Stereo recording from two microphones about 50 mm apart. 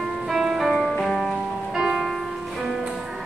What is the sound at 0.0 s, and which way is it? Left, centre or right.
Music, centre.